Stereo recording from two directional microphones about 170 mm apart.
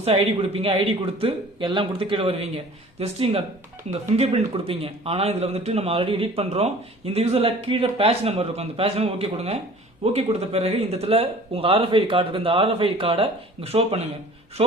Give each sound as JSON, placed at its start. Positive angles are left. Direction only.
{"t": 0.0, "sound": "speech", "side_deg": -35}